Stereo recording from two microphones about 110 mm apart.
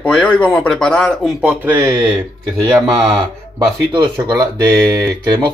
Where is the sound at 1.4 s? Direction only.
15° right (ahead or behind).